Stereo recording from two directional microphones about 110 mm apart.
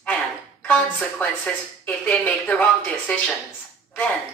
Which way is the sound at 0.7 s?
10° left (ahead or behind).